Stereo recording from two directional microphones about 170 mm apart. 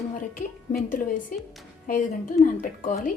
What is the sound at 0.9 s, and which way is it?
Speech, 50° left (ahead or behind).